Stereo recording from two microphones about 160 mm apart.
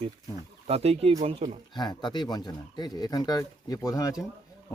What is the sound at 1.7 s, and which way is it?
Speech, 25° left (ahead or behind).